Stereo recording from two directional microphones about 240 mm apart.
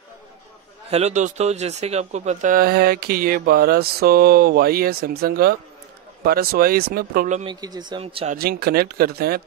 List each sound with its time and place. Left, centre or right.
0.8 s speech: right
7.6 s speech: centre
8.4 s speech: right